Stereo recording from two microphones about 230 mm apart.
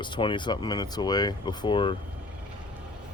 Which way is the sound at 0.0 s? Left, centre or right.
Left.